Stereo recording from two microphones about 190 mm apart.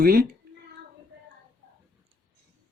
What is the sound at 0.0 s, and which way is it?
Speech, 50° right (ahead or behind).